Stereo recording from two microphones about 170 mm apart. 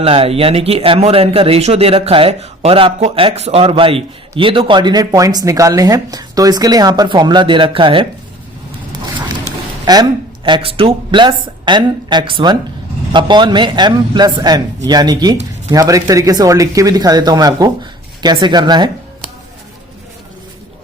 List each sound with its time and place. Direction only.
0.0 s speech: 35° right (ahead or behind)
9.8 s a woman's voice: 25° right (ahead or behind)